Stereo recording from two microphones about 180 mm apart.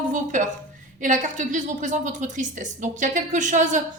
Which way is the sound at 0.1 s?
45° right (ahead or behind).